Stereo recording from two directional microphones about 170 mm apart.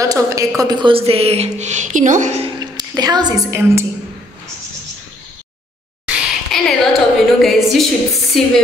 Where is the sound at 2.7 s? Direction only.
25° right (ahead or behind).